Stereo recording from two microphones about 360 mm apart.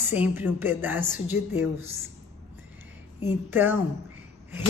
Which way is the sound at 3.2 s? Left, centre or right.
Centre.